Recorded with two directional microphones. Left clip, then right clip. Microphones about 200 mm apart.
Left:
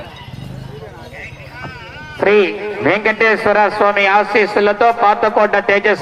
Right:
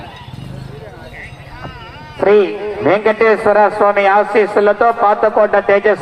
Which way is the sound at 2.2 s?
35° left (ahead or behind).